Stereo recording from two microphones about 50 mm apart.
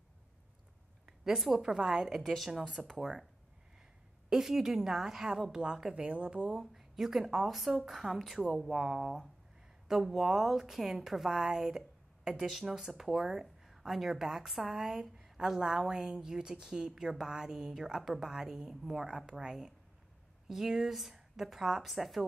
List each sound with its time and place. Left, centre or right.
1.0 s a woman's voice: centre
4.3 s speech: centre
5.9 s speech: right
6.5 s a woman's voice: centre